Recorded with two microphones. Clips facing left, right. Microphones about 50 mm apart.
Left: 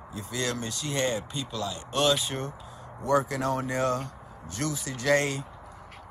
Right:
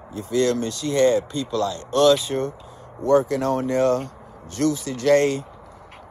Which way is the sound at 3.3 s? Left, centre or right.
Right.